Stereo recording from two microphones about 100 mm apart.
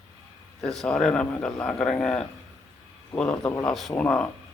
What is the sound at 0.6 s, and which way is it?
Speech, 5° left (ahead or behind).